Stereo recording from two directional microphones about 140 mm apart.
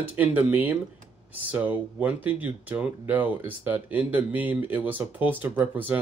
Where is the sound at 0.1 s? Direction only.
10° right (ahead or behind).